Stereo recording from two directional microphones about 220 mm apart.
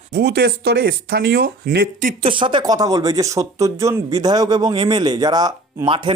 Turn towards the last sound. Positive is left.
turn(degrees=-20)  # may be behind; listen again after turning